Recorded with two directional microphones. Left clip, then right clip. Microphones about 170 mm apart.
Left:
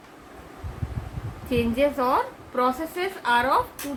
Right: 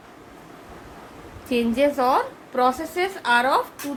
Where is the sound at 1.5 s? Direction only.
40° right (ahead or behind).